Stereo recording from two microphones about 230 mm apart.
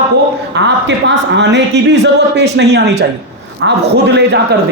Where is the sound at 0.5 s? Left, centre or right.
Right.